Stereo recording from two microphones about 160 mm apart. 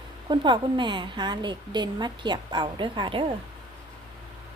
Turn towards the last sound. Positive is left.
turn(degrees=-30)  # may be behind; listen again after turning